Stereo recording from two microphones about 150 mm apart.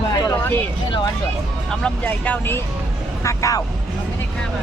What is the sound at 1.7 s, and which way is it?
Speech, 10° left (ahead or behind).